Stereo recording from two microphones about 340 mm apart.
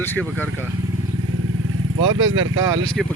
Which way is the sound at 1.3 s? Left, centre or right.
Right.